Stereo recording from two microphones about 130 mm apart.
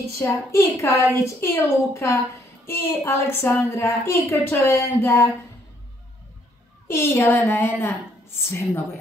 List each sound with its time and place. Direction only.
0.2 s a woman's voice: 20° left (ahead or behind)
6.9 s a woman's voice: 20° left (ahead or behind)